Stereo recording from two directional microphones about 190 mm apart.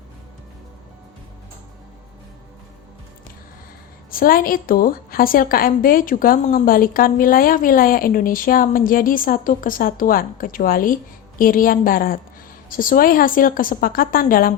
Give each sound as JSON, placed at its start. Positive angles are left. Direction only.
{"t": 4.1, "sound": "a woman's voice", "side_deg": 50}